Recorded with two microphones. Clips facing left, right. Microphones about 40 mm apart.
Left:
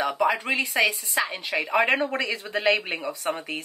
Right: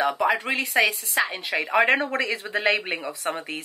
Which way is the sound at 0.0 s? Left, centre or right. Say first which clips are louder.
Right 1 dB; centre.